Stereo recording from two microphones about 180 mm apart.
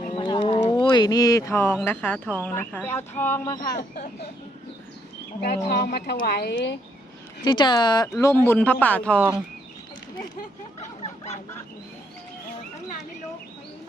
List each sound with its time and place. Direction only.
0.0 s bird: 30° left (ahead or behind); by 1.7 s 15° left (ahead or behind)
1.8 s speech: 10° left (ahead or behind)
3.7 s speech: 45° left (ahead or behind)
5.6 s speech: 60° left (ahead or behind); by 6.7 s 75° left (ahead or behind)
7.4 s speech: 25° left (ahead or behind); by 9.2 s 5° left (ahead or behind)
10.8 s a sound: 35° left (ahead or behind)